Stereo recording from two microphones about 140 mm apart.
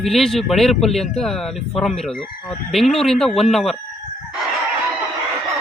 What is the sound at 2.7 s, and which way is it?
Speech, centre (ahead or behind).